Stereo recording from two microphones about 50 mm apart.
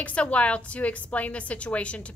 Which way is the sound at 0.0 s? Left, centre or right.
Left.